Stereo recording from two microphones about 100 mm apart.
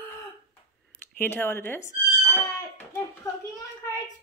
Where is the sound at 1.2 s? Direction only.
20° left (ahead or behind).